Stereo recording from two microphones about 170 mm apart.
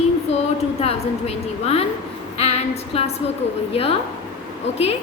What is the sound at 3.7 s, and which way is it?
Speech, 35° left (ahead or behind).